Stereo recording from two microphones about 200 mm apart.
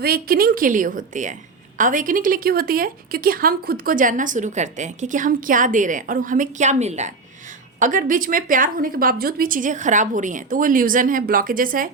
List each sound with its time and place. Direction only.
0.0 s a woman's voice: 50° right (ahead or behind)